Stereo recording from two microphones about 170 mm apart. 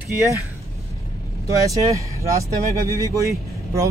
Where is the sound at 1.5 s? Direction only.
20° right (ahead or behind).